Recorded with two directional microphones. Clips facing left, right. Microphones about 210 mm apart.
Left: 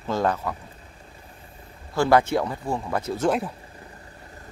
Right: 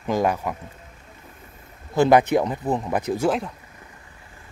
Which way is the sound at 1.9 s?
20° right (ahead or behind).